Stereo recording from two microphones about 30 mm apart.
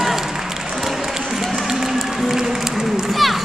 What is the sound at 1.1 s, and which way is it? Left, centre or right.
Run, centre.